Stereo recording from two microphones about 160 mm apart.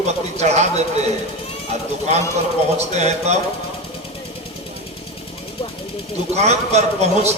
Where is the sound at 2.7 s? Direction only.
45° right (ahead or behind).